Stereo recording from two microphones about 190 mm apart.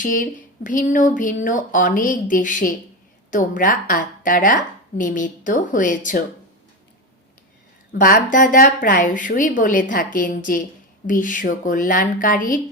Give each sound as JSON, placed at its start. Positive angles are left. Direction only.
{"t": 0.0, "sound": "speech", "side_deg": 45}
{"t": 7.9, "sound": "speech", "side_deg": 45}